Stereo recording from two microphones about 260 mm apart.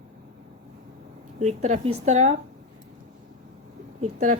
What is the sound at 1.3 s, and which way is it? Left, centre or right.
A woman's voice, right.